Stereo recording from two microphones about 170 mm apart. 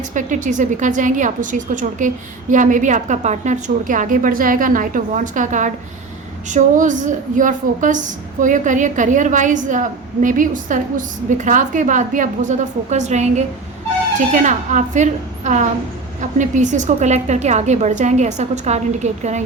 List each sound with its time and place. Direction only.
0.1 s a woman's voice: 50° right (ahead or behind)